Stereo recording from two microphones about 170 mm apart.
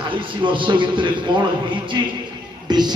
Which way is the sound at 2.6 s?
25° right (ahead or behind).